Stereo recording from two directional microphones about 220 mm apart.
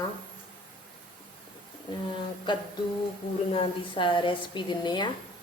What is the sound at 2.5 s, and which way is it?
A woman's voice, 20° left (ahead or behind).